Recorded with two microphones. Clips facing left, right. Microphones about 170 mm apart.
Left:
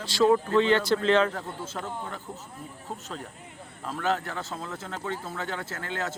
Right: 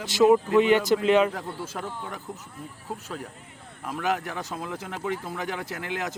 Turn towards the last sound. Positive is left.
turn(degrees=-15)  # may be behind; listen again after turning